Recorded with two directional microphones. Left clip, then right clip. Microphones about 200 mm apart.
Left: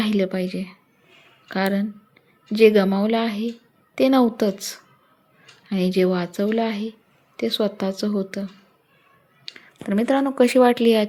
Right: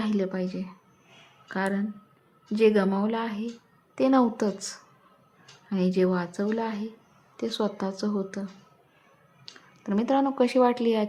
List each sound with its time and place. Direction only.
0.0 s a woman's voice: 20° left (ahead or behind)
9.5 s speech: 20° left (ahead or behind)